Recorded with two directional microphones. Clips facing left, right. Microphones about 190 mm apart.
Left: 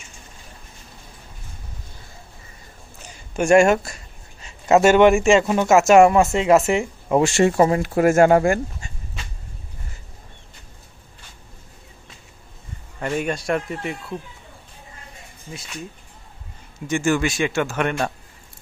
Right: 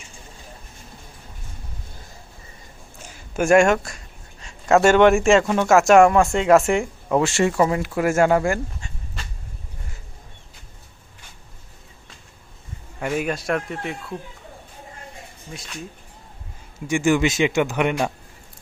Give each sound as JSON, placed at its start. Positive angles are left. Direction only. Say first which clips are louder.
{"t": 3.0, "sound": "a sound", "louder": "even", "side_deg": -5}
{"t": 4.8, "sound": "speech", "louder": "left 1 dB", "side_deg": 5}
{"t": 7.1, "sound": "speech", "louder": "left 2 dB", "side_deg": 15}
{"t": 7.4, "sound": "speech", "louder": "left 3 dB", "side_deg": 35}
{"t": 13.0, "sound": "speech", "louder": "even", "side_deg": -5}
{"t": 15.5, "sound": "speech", "louder": "left 1 dB", "side_deg": 0}
{"t": 16.8, "sound": "speech", "louder": "right 2 dB", "side_deg": -15}